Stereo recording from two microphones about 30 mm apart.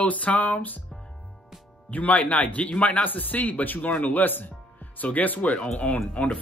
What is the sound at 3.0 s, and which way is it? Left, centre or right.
Speech, left.